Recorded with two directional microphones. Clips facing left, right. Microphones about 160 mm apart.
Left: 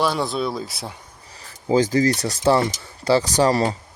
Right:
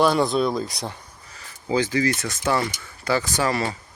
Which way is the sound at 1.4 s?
40° left (ahead or behind).